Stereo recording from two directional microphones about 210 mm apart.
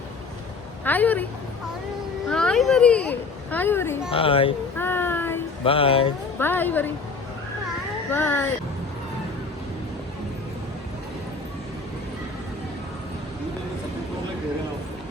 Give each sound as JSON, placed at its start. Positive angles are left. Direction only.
{"t": 0.9, "sound": "a woman's voice", "side_deg": 10}
{"t": 2.3, "sound": "a child's voice", "side_deg": 5}
{"t": 4.1, "sound": "speech", "side_deg": 25}
{"t": 4.8, "sound": "child singing", "side_deg": 10}
{"t": 5.6, "sound": "speech", "side_deg": 25}
{"t": 6.4, "sound": "a woman's voice", "side_deg": 10}
{"t": 8.1, "sound": "a woman's voice", "side_deg": 10}